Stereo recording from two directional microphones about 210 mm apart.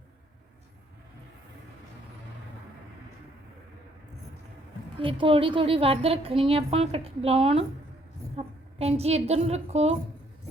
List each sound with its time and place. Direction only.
4.9 s a woman's voice: 25° right (ahead or behind)